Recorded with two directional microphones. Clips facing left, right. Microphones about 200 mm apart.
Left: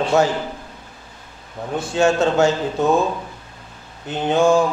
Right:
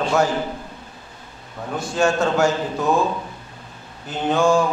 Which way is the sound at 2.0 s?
25° left (ahead or behind).